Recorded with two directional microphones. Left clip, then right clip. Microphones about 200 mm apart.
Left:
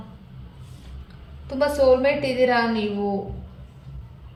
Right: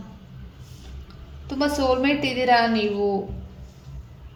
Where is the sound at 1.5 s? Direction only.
40° right (ahead or behind).